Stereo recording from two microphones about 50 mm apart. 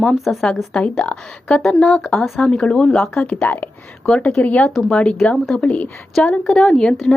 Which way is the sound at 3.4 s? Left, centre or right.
Left.